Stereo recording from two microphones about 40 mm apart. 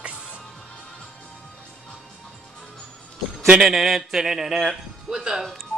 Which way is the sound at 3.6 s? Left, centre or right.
Centre.